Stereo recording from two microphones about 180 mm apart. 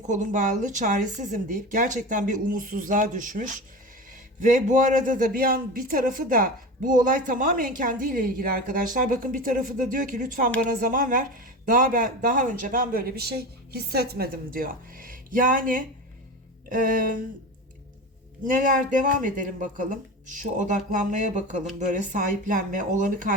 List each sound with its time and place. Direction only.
0.0 s a man's voice: 45° right (ahead or behind)
18.4 s a man's voice: 45° right (ahead or behind)